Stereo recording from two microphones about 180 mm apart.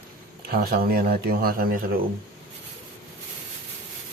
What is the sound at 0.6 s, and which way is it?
Speech, 55° right (ahead or behind).